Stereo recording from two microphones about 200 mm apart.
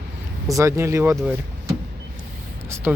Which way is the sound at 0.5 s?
15° right (ahead or behind).